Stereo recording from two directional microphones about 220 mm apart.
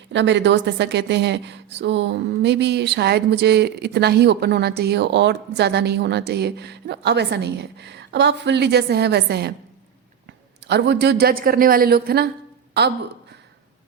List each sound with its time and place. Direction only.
0.1 s a woman's voice: 55° right (ahead or behind)
10.7 s a woman's voice: 50° right (ahead or behind)